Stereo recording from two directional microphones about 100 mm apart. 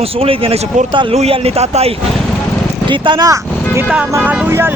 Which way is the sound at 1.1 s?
80° right.